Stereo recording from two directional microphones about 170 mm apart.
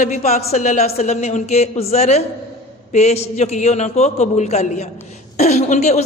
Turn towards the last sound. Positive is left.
turn(degrees=40)  # may be behind; listen again after turning